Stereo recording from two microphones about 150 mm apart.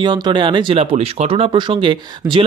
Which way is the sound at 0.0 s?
30° right (ahead or behind).